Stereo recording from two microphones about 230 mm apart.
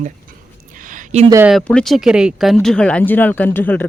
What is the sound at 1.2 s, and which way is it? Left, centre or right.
Speech, centre.